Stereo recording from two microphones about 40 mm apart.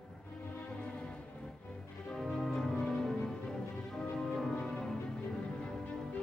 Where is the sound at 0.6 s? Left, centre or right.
Left.